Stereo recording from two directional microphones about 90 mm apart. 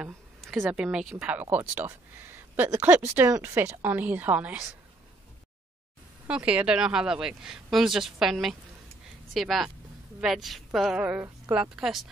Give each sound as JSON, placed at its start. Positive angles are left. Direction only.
{"t": 0.4, "sound": "a sound", "side_deg": 0}
{"t": 0.7, "sound": "a woman's voice", "side_deg": -10}
{"t": 1.2, "sound": "speech", "side_deg": -20}
{"t": 6.2, "sound": "a woman's voice", "side_deg": -10}
{"t": 11.0, "sound": "a woman's voice", "side_deg": -15}